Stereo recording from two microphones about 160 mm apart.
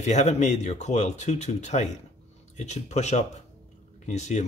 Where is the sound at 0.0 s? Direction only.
45° left (ahead or behind).